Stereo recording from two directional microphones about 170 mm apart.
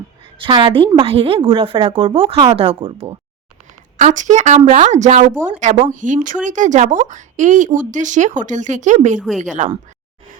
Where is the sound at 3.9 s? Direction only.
45° right (ahead or behind).